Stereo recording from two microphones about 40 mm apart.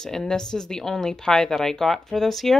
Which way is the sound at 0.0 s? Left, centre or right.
Centre.